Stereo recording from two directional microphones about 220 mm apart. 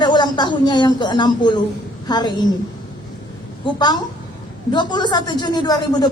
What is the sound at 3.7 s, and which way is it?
A woman's voice, 20° left (ahead or behind).